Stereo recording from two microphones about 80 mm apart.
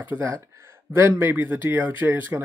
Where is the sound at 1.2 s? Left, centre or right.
Right.